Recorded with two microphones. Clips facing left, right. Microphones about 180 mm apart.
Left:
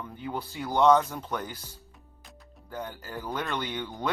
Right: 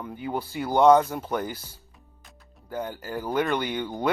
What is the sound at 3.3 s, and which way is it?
Speech, 10° right (ahead or behind).